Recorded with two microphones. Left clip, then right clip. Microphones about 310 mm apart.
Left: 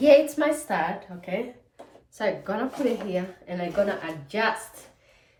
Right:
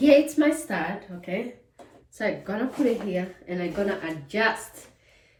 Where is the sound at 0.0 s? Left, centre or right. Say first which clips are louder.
Left 1 dB; centre.